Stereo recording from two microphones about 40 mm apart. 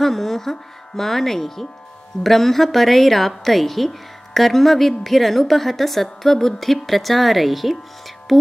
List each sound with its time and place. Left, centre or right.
0.0 s a woman's voice: centre